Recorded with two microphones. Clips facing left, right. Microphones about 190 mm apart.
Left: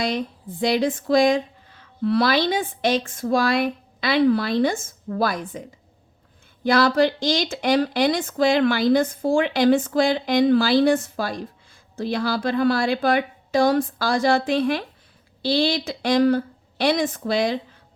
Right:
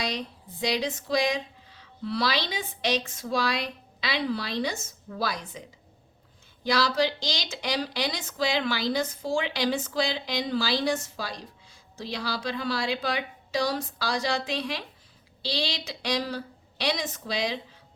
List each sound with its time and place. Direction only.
0.0 s speech: 50° left (ahead or behind)
6.7 s speech: 55° left (ahead or behind)